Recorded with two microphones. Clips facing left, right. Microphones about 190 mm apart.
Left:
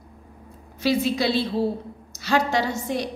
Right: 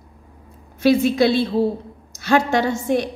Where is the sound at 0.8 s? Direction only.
55° right (ahead or behind).